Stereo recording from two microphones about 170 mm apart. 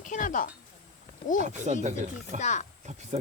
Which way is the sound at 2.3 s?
45° left (ahead or behind).